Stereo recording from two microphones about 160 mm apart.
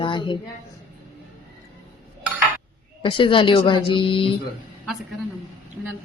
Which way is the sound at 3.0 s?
30° left (ahead or behind).